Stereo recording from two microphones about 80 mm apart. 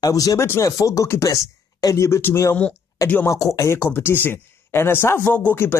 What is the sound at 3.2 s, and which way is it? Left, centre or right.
Speech, left.